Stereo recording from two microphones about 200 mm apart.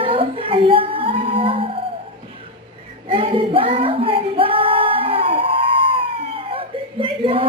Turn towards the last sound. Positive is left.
turn(degrees=-25)  # may be behind; listen again after turning